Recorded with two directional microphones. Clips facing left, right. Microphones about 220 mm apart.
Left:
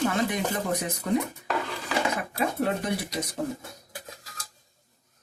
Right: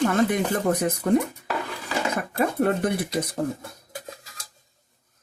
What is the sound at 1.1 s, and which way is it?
Speech, 55° right (ahead or behind).